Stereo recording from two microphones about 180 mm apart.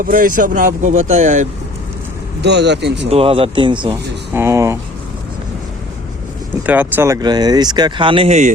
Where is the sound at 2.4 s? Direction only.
70° right (ahead or behind).